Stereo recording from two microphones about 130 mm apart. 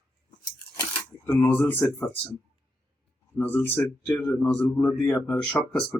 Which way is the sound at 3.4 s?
15° left (ahead or behind).